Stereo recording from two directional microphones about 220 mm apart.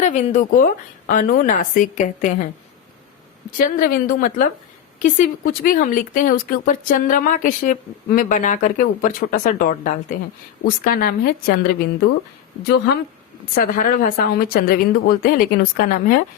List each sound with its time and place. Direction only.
0.0 s speech: 35° left (ahead or behind)
3.6 s a woman's voice: 40° left (ahead or behind)
13.6 s speech: 35° left (ahead or behind)